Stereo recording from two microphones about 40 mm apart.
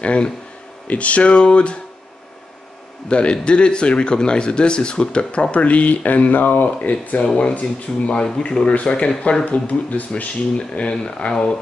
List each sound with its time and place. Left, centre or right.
0.0 s speech: left
3.1 s speech: left
7.2 s speech: left
9.4 s speech: left
10.7 s speech: left